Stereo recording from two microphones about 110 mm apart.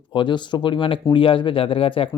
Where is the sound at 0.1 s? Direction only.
45° left (ahead or behind).